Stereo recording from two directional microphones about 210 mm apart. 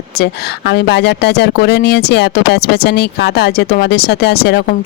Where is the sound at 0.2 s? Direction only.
55° left (ahead or behind).